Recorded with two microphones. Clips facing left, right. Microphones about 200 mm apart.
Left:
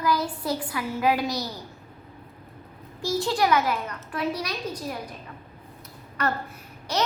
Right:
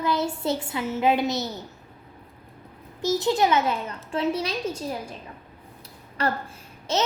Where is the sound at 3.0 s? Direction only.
20° right (ahead or behind).